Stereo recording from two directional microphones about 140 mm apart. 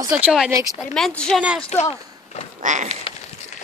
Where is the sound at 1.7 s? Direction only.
50° left (ahead or behind).